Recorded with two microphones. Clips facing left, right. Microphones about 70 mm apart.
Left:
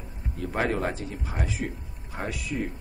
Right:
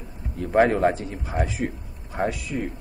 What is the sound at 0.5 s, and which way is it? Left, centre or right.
Speech, centre.